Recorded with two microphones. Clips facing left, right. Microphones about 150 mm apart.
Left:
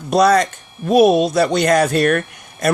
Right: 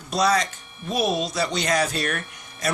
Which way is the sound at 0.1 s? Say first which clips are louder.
Left 8 dB; 55° left (ahead or behind).